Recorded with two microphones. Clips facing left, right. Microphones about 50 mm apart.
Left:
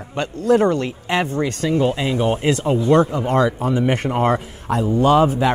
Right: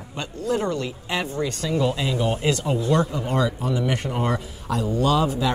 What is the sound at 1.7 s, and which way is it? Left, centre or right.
Speech, left.